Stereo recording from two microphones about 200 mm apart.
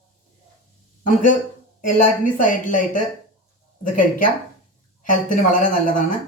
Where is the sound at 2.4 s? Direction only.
40° left (ahead or behind).